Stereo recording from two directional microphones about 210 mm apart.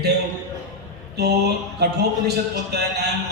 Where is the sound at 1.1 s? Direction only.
50° right (ahead or behind).